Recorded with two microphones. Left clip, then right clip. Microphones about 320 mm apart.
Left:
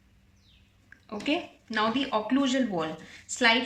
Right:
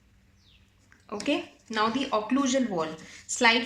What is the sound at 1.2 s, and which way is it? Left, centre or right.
Speech, centre.